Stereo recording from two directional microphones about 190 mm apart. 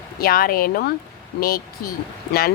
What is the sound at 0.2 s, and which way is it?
Speech, 50° left (ahead or behind).